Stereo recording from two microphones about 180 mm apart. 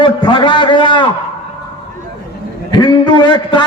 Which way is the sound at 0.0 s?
25° left (ahead or behind).